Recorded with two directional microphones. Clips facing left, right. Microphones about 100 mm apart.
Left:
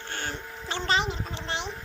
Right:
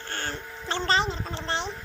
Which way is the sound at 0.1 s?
15° left (ahead or behind).